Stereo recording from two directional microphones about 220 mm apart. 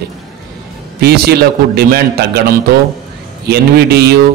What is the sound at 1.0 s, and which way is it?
A man's voice, 45° right (ahead or behind).